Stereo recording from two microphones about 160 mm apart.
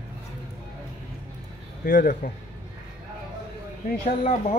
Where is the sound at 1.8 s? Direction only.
60° left (ahead or behind).